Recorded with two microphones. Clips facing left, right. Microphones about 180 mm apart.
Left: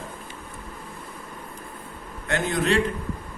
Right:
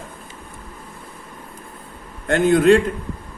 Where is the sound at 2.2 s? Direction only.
50° right (ahead or behind).